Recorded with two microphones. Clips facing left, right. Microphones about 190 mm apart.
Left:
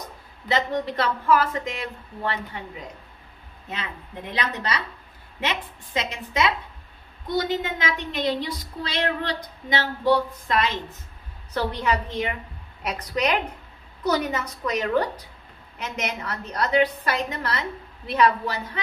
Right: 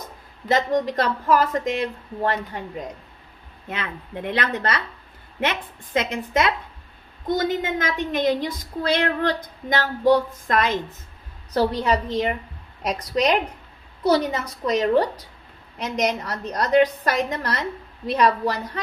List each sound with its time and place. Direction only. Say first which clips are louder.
0.5 s a woman's voice: right 4 dB; 40° right (ahead or behind)
3.6 s a woman's voice: right 3 dB; 55° right (ahead or behind)
11.5 s a woman's voice: right 4 dB; 35° right (ahead or behind)